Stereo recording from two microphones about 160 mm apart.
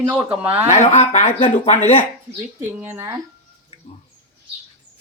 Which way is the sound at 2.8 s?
15° right (ahead or behind).